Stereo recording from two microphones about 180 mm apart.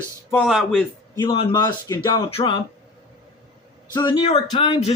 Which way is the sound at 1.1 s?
25° left (ahead or behind).